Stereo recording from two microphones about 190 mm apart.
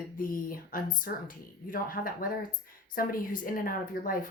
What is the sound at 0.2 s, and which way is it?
Speech, 50° left (ahead or behind).